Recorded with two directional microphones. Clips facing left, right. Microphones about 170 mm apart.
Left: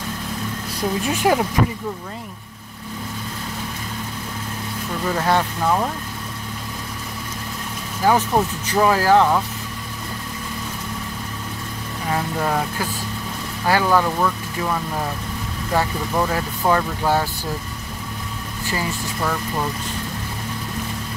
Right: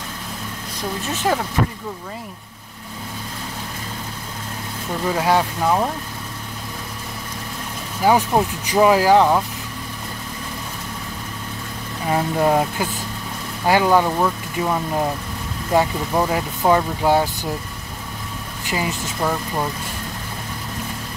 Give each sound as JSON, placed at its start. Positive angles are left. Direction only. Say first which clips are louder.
{"t": 1.1, "sound": "speech", "louder": "left 2 dB", "side_deg": 10}
{"t": 5.1, "sound": "speech", "louder": "right 1 dB", "side_deg": -10}
{"t": 8.0, "sound": "speech", "louder": "right 1 dB", "side_deg": -15}
{"t": 12.1, "sound": "speech", "louder": "right 5 dB", "side_deg": -20}
{"t": 18.7, "sound": "speech", "louder": "right 2 dB", "side_deg": -15}